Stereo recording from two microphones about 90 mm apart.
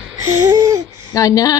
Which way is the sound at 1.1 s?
40° left (ahead or behind).